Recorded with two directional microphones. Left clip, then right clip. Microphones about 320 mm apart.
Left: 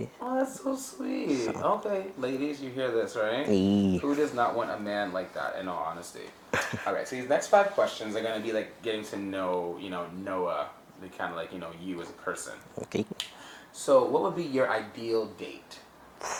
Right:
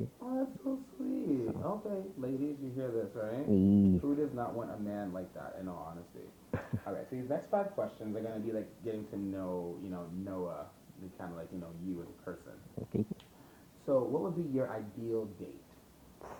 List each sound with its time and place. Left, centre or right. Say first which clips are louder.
0.2 s speech: left 9 dB; centre
3.6 s speech: left 3 dB; left
3.9 s speech: left 7 dB; centre
13.8 s speech: left 9 dB; centre
14.3 s speech: left 9 dB; centre